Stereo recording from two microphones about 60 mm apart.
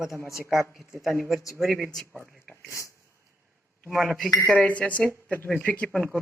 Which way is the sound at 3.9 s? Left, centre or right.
Centre.